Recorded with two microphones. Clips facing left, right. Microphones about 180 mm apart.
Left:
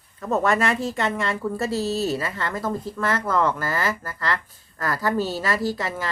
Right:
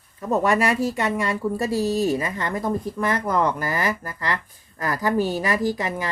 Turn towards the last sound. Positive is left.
turn(degrees=-15)  # may be behind; listen again after turning